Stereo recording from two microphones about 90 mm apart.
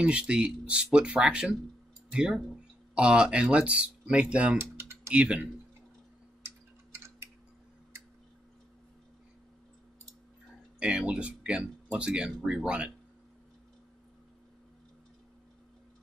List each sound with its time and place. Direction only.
0.0 s speech: 10° right (ahead or behind)
4.6 s typing: 30° right (ahead or behind)
5.1 s speech: 15° right (ahead or behind)
10.8 s speech: 10° right (ahead or behind)